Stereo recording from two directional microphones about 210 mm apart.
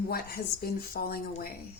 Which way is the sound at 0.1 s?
45° left (ahead or behind).